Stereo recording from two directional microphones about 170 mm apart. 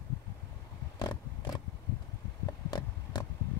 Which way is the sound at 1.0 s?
20° left (ahead or behind).